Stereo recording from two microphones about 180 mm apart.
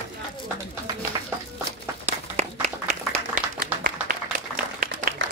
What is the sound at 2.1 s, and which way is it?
Applause, 40° right (ahead or behind).